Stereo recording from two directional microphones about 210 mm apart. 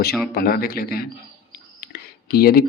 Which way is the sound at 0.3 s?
45° left (ahead or behind).